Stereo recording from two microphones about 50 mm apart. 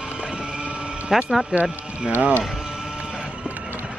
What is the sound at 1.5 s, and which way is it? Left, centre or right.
Speech, right.